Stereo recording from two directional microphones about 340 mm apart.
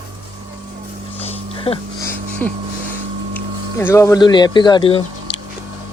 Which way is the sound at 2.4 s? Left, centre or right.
Centre.